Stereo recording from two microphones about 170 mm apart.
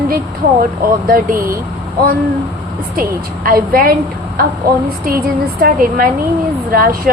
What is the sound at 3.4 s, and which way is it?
Speech, 60° right (ahead or behind).